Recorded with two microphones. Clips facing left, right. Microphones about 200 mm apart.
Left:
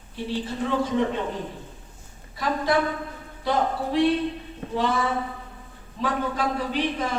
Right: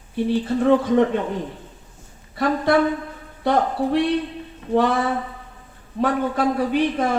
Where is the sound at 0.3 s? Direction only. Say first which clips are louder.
Right 9 dB; 60° right (ahead or behind).